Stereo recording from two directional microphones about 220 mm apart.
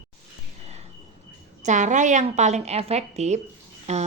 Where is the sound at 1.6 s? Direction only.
35° right (ahead or behind).